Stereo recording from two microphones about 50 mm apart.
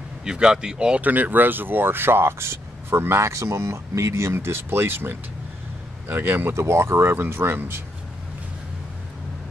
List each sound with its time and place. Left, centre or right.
0.2 s speech: centre
1.0 s speech: right
6.1 s speech: right
6.5 s speech: right